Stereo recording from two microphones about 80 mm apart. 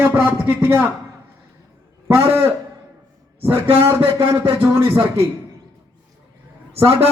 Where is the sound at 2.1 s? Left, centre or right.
Right.